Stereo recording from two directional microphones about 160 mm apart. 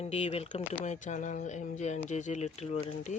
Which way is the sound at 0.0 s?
40° left (ahead or behind).